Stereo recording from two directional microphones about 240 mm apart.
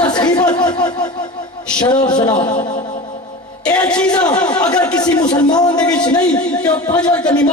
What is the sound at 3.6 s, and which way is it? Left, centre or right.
Speech, centre.